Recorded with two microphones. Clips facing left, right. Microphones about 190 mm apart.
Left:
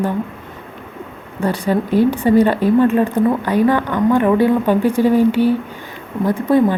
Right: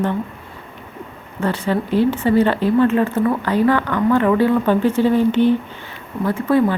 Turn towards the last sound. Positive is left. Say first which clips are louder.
# left 2 dB
turn(degrees=15)  # may be behind; listen again after turning